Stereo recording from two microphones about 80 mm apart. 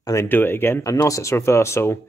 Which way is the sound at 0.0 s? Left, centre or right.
Left.